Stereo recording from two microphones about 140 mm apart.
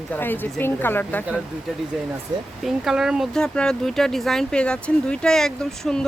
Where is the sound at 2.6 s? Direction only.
5° right (ahead or behind).